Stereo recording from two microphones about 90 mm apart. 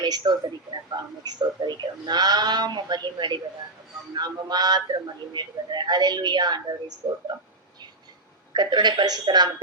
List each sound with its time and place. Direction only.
0.0 s speech: 55° right (ahead or behind)
8.5 s speech: 55° right (ahead or behind)